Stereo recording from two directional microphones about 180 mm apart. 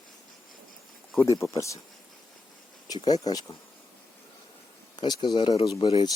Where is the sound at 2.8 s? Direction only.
20° left (ahead or behind).